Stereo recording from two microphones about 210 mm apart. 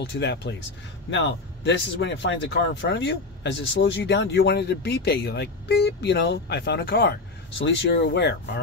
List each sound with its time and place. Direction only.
0.0 s speech: 50° left (ahead or behind)